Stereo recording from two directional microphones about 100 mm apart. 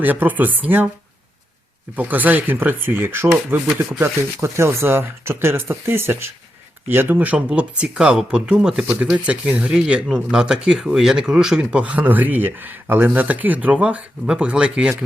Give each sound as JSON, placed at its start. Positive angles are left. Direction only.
{"t": 0.0, "sound": "speech", "side_deg": -15}
{"t": 2.0, "sound": "speech", "side_deg": -15}